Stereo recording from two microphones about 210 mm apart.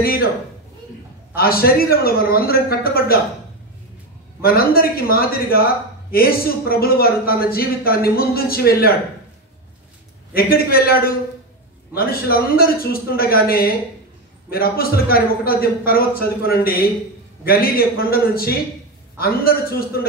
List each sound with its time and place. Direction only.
0.0 s a man's voice: 45° left (ahead or behind)
1.3 s a man's voice: 45° left (ahead or behind)
4.4 s a man's voice: 45° left (ahead or behind)
10.3 s a man's voice: 45° left (ahead or behind)